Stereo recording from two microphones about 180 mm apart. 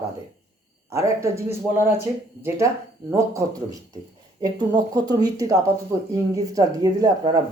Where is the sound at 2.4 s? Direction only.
15° right (ahead or behind).